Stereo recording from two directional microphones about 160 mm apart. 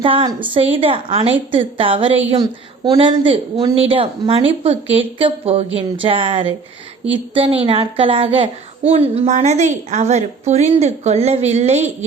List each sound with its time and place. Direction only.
0.0 s a woman's voice: 35° right (ahead or behind)